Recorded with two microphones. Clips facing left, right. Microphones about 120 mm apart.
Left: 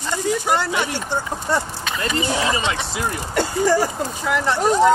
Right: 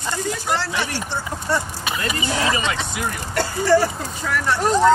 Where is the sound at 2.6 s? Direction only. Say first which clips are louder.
Left 1 dB; 20° left (ahead or behind).